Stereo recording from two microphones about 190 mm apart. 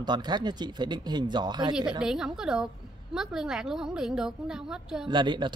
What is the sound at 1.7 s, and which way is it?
A woman's voice, 5° right (ahead or behind).